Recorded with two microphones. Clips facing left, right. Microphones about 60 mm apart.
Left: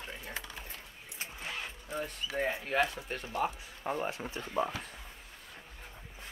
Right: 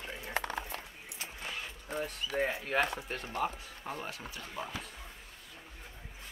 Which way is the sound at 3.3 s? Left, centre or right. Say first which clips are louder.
Left 2 dB; centre.